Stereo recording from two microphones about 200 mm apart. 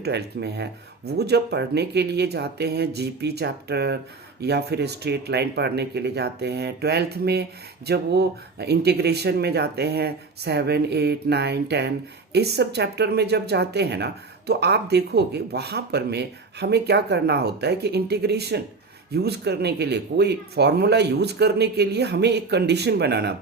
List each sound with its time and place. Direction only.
0.0 s speech: 55° right (ahead or behind)